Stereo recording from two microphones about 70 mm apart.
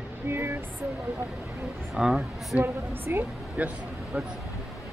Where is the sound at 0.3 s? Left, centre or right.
Right.